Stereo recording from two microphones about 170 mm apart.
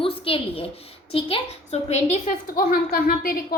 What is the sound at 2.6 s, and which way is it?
Speech, 55° left (ahead or behind).